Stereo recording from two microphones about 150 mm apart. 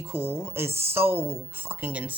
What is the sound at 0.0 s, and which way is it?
A woman's voice, 15° right (ahead or behind).